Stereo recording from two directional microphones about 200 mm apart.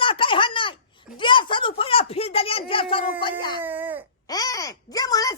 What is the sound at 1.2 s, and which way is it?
A child's voice, 25° left (ahead or behind).